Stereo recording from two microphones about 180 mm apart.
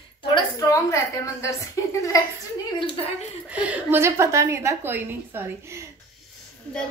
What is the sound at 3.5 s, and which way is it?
A woman's voice, 10° right (ahead or behind).